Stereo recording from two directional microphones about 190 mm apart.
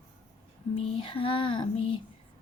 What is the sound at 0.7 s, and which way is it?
A woman's voice, 30° left (ahead or behind).